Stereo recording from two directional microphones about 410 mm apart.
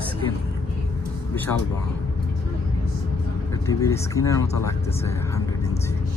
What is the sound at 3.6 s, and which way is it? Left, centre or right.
Speech, centre.